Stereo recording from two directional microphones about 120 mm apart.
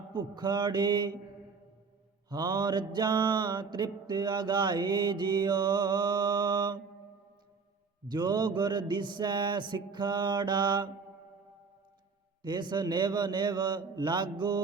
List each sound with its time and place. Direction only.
0.1 s mantra: 35° right (ahead or behind)
2.3 s mantra: 40° right (ahead or behind)
8.0 s mantra: 35° right (ahead or behind)
12.4 s mantra: 40° right (ahead or behind)